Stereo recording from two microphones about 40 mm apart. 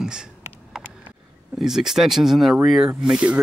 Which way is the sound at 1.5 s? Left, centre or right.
Centre.